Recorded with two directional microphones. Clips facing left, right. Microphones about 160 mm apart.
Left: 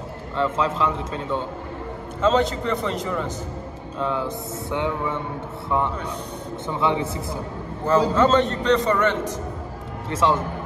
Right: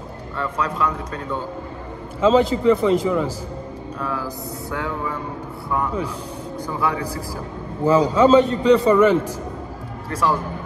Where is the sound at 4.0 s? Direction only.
25° left (ahead or behind).